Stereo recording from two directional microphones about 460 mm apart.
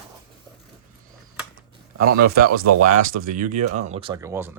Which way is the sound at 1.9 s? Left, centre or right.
Right.